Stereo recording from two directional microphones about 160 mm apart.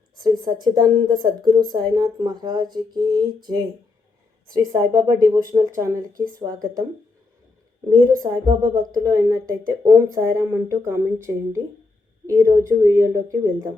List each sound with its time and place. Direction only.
0.2 s a woman's voice: 25° right (ahead or behind)
8.2 s a woman's voice: 20° right (ahead or behind)